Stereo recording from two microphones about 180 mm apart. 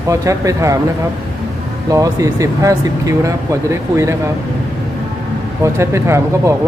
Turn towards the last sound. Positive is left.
turn(degrees=-15)  # may be behind; listen again after turning